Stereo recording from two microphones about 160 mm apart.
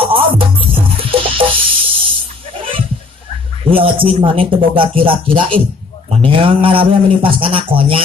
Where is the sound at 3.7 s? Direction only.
35° right (ahead or behind).